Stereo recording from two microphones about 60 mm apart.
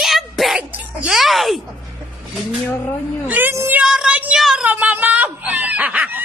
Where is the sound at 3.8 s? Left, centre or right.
Centre.